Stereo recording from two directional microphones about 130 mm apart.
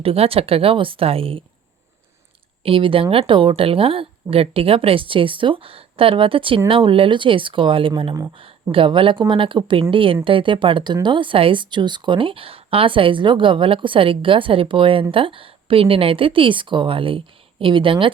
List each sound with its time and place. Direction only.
0.0 s speech: 50° right (ahead or behind)
2.6 s speech: 45° right (ahead or behind)